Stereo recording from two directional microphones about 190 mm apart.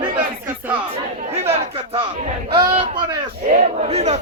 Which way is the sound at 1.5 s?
25° right (ahead or behind).